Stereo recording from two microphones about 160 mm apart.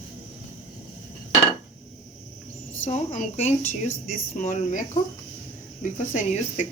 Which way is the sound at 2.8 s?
50° left (ahead or behind).